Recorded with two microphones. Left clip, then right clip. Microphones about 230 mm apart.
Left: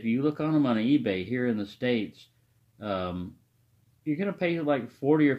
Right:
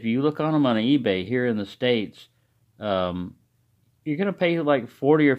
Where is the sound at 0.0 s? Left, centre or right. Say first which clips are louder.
Right 5 dB; right.